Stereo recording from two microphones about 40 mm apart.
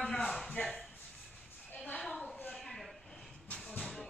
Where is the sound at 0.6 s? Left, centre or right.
Centre.